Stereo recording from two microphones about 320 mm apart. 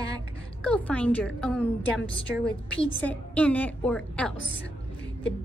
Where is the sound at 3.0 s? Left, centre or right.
Centre.